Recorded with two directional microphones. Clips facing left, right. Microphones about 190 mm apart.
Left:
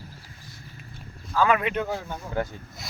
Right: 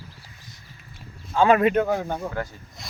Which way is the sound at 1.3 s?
35° right (ahead or behind).